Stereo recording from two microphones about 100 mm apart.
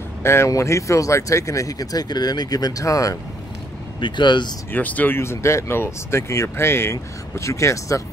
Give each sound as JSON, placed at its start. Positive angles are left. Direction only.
{"t": 0.2, "sound": "speech", "side_deg": 25}
{"t": 4.0, "sound": "speech", "side_deg": 50}
{"t": 4.7, "sound": "speech", "side_deg": 15}